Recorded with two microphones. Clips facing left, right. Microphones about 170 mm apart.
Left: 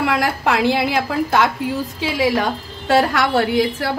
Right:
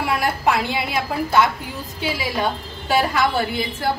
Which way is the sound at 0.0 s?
85° left.